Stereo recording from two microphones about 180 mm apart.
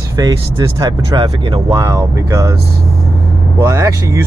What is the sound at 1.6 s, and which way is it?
Speech, 20° right (ahead or behind).